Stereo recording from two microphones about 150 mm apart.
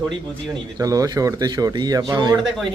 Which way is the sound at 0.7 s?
25° right (ahead or behind).